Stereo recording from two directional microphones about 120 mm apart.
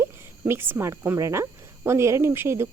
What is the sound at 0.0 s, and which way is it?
Speech, 20° right (ahead or behind).